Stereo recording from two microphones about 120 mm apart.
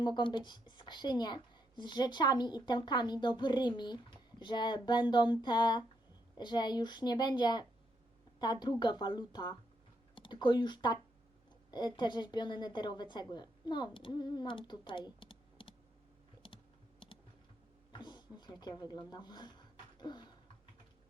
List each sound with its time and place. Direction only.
0.0 s a woman's voice: 40° left (ahead or behind)
16.4 s computer keyboard: 45° left (ahead or behind)
17.9 s a sound: 35° left (ahead or behind)